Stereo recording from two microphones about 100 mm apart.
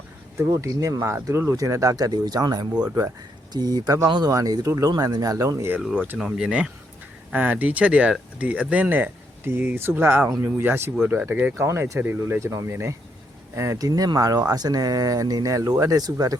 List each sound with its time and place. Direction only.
0.3 s speech: 30° right (ahead or behind)
6.1 s speech: 5° right (ahead or behind)
11.5 s speech: 25° right (ahead or behind)